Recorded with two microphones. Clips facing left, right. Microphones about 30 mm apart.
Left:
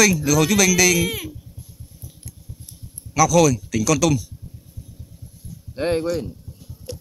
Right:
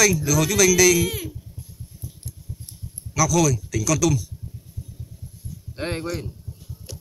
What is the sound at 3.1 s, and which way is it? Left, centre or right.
Speech, left.